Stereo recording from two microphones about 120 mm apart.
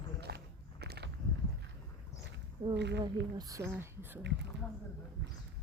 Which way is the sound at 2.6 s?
35° right (ahead or behind).